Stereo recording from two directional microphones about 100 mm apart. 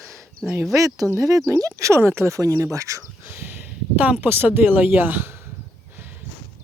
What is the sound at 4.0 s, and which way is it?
Speech, 20° right (ahead or behind).